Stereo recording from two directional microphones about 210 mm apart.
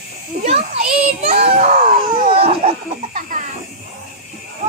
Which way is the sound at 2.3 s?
30° right (ahead or behind).